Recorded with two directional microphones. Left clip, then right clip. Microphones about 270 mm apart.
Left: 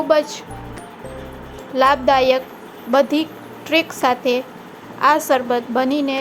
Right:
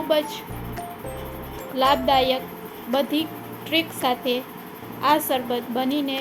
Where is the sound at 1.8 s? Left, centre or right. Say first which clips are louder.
Left 5 dB; centre.